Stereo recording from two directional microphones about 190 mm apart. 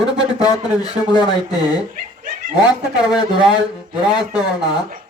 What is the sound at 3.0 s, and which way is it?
Speech, 5° right (ahead or behind).